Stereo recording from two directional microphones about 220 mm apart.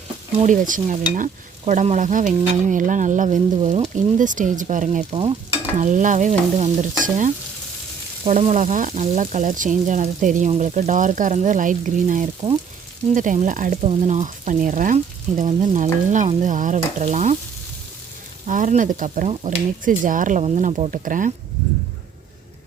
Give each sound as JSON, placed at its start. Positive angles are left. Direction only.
{"t": 0.3, "sound": "stir", "side_deg": -35}
{"t": 18.4, "sound": "stir", "side_deg": -35}